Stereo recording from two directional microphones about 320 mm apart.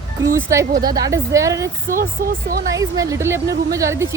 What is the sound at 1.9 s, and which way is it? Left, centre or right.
Speech, right.